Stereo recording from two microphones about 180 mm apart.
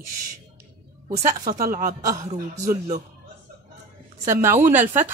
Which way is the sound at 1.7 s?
50° right (ahead or behind).